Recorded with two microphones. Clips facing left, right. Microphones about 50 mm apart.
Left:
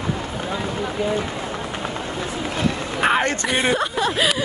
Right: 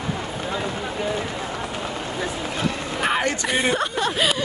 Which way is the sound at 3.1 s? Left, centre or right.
Left.